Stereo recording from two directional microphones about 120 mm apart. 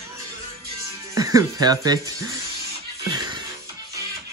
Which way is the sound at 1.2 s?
30° right (ahead or behind).